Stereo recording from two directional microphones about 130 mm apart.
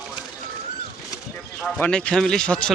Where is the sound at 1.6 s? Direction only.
10° left (ahead or behind).